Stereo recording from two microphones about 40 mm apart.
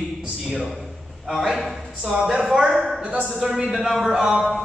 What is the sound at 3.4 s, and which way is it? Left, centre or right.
Speech, centre.